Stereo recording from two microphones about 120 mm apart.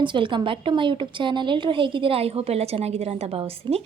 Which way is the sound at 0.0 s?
45° right (ahead or behind).